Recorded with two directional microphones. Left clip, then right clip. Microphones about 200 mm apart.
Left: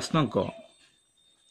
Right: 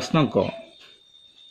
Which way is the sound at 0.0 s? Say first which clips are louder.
Right 5 dB; 45° left (ahead or behind).